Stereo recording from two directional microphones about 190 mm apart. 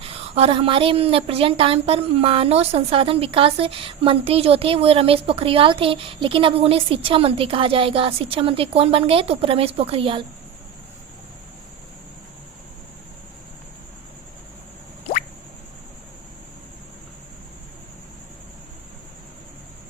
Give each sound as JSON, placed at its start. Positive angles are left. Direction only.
{"t": 0.0, "sound": "a woman's voice", "side_deg": -30}